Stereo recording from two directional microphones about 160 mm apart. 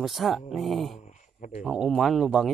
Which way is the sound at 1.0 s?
50° left (ahead or behind).